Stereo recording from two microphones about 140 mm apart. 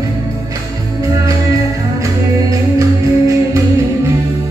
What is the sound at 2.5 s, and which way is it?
Music, 25° right (ahead or behind).